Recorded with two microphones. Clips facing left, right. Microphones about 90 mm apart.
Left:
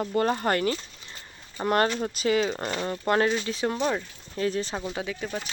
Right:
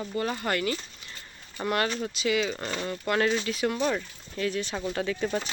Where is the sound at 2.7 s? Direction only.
30° left (ahead or behind).